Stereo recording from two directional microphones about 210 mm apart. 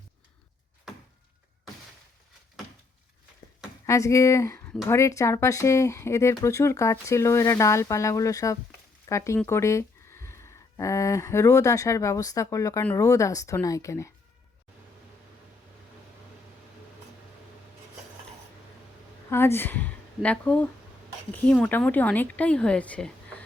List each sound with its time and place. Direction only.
3.8 s speech: 15° left (ahead or behind)
19.3 s a woman's voice: 10° left (ahead or behind)